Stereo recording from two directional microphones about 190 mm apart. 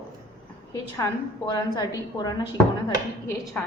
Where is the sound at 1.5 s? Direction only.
20° left (ahead or behind).